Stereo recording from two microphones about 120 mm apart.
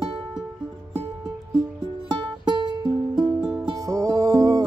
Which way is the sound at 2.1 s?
35° right (ahead or behind).